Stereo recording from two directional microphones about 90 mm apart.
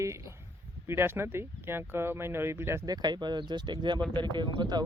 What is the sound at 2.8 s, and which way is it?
Speech, 50° right (ahead or behind).